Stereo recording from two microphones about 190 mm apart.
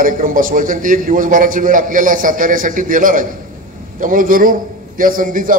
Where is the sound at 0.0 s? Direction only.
45° right (ahead or behind).